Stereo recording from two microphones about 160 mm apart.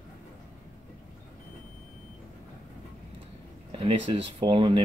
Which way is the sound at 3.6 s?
35° right (ahead or behind).